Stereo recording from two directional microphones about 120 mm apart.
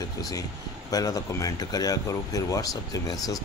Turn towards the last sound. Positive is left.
turn(degrees=30)  # may be behind; listen again after turning